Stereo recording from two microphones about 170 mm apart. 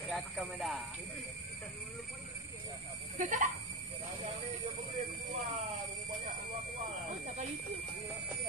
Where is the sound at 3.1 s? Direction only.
50° right (ahead or behind).